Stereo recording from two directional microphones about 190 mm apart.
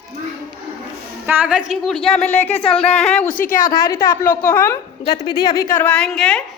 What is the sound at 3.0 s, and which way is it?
Speech, 5° left (ahead or behind).